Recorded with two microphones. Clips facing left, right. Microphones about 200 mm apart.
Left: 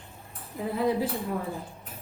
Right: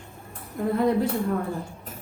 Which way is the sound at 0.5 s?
5° left (ahead or behind).